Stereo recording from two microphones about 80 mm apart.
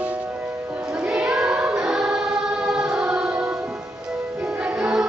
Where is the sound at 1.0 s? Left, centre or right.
Centre.